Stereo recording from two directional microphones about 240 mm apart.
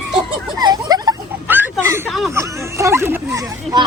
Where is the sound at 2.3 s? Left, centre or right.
Centre.